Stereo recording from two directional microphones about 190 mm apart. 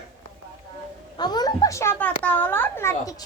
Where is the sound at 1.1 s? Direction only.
20° left (ahead or behind).